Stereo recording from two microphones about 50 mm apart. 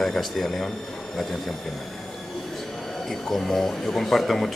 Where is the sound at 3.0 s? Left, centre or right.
Centre.